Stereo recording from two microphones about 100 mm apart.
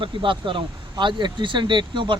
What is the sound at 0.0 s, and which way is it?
Speech, 55° right (ahead or behind).